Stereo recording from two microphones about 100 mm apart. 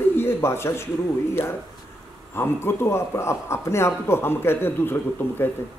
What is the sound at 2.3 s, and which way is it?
A man's voice, 25° left (ahead or behind).